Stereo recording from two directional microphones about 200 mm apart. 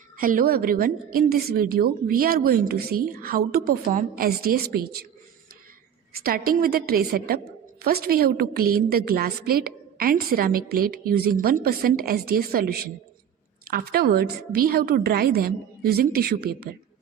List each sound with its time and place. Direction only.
0.2 s a woman's voice: 45° right (ahead or behind)
6.1 s a woman's voice: 45° right (ahead or behind)